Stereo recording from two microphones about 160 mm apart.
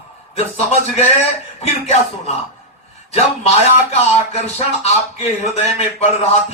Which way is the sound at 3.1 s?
40° left (ahead or behind).